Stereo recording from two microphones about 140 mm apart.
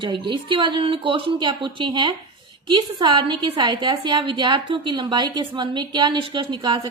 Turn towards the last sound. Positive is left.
turn(degrees=-30)  # may be behind; listen again after turning